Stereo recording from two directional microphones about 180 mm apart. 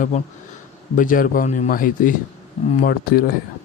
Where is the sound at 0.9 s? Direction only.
50° left (ahead or behind).